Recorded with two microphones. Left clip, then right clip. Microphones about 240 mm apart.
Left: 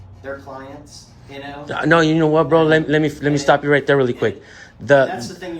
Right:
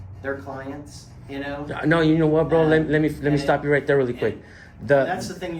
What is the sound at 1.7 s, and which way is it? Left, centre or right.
Speech, left.